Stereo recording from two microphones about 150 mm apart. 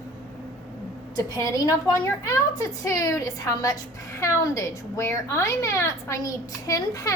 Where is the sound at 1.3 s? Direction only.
20° left (ahead or behind).